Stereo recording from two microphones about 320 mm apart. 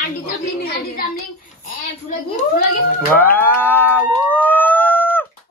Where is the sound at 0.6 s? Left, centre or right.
Left.